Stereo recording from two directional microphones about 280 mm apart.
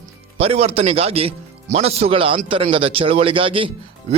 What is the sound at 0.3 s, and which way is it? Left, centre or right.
A man's voice, right.